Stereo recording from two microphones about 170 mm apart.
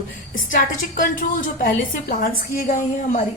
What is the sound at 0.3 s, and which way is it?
A woman's voice, 50° left (ahead or behind).